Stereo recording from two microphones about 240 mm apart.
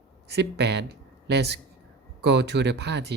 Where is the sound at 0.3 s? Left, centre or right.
Right.